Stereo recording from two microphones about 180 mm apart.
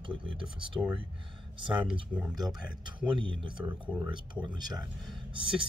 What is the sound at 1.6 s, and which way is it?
Speech, 5° right (ahead or behind).